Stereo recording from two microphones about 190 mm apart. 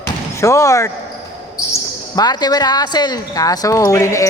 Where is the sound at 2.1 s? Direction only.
20° left (ahead or behind).